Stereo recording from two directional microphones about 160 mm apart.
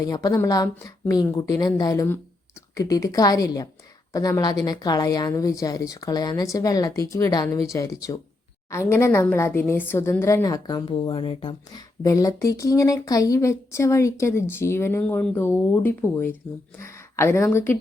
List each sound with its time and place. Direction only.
0.0 s a woman's voice: 25° left (ahead or behind)